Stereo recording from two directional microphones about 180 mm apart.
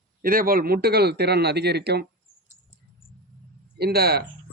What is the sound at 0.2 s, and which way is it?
Speech, 50° right (ahead or behind).